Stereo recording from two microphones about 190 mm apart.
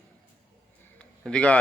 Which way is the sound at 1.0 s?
5° left (ahead or behind).